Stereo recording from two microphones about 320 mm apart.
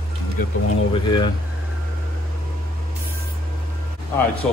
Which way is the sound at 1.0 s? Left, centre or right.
Centre.